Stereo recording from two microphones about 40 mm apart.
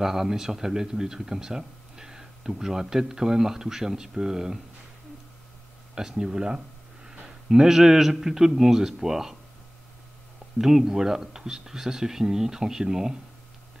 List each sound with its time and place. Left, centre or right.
0.0 s speech: centre
5.9 s a sound: centre
7.4 s speech: centre
10.6 s speech: centre